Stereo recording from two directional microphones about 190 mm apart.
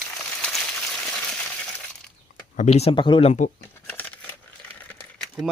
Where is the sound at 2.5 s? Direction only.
35° left (ahead or behind).